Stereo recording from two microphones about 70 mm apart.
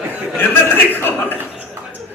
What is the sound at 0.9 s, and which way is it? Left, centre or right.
Speech, left.